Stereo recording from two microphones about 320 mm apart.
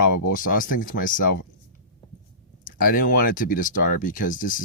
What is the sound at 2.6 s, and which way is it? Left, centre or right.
Speech, left.